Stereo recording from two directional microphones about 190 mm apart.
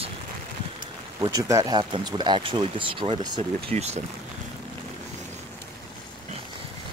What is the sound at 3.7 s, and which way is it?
Speech, 35° right (ahead or behind).